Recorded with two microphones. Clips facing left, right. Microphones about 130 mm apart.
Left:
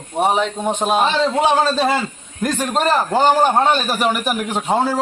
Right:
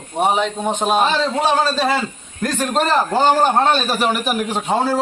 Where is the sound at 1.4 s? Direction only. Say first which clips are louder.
Left 2 dB; 20° left (ahead or behind).